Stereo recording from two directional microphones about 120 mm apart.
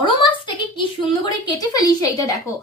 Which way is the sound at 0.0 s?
45° left (ahead or behind).